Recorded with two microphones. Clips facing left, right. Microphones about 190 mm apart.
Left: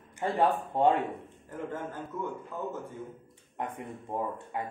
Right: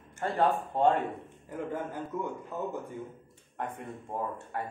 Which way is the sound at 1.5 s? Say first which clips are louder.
Right 2 dB; 15° right (ahead or behind).